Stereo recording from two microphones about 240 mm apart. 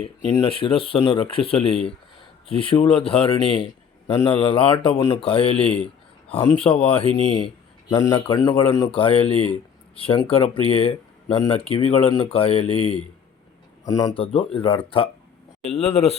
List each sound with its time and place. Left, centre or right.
0.3 s speech: left